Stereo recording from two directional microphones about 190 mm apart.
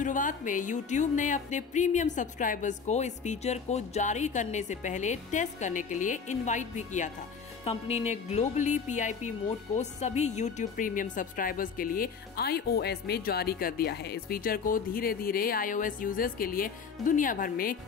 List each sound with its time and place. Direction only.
0.0 s music: 45° left (ahead or behind)
9.8 s a woman's voice: 35° left (ahead or behind)